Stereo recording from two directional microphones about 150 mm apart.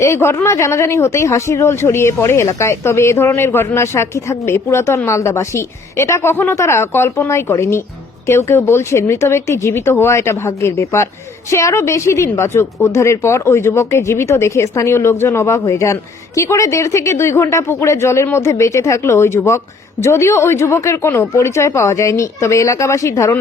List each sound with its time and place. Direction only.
0.0 s speech: 15° left (ahead or behind)